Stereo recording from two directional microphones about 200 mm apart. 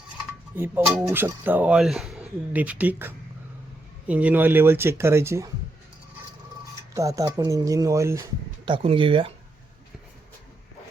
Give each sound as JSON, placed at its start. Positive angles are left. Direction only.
{"t": 0.5, "sound": "speech", "side_deg": -10}
{"t": 6.9, "sound": "speech", "side_deg": -15}
{"t": 8.6, "sound": "speech", "side_deg": -25}